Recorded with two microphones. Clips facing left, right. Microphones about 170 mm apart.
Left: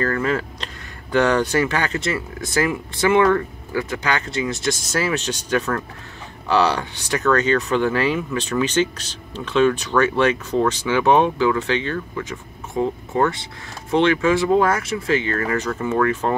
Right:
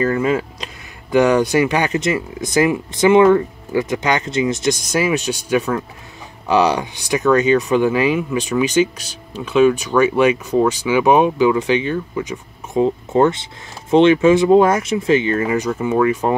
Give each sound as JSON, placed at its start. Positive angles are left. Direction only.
{"t": 0.0, "sound": "speech", "side_deg": -15}